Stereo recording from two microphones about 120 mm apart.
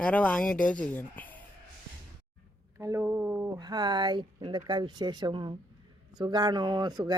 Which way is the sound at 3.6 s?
35° right (ahead or behind).